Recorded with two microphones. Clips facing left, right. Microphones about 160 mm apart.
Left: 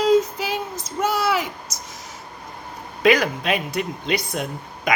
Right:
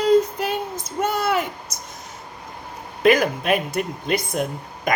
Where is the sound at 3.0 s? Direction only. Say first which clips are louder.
Right 1 dB; 50° right (ahead or behind).